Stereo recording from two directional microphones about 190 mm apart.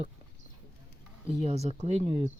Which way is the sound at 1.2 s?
35° right (ahead or behind).